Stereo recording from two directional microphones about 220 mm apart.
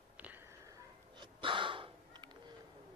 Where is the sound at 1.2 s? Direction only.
20° right (ahead or behind).